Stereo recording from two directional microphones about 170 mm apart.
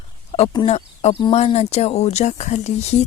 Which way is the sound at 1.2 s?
35° left (ahead or behind).